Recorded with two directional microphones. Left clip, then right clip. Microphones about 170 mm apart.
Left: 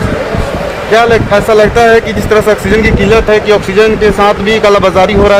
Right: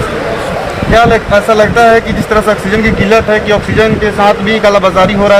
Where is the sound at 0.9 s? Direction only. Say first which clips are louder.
Even; 70° left (ahead or behind).